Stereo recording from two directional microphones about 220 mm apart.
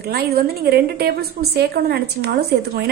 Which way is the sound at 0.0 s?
45° right (ahead or behind).